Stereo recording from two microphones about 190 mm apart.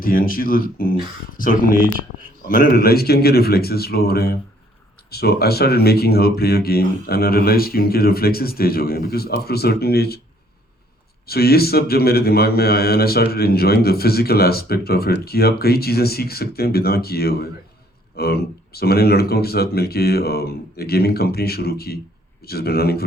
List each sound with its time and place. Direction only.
0.0 s a man's voice: 50° left (ahead or behind)
11.3 s a man's voice: 55° left (ahead or behind)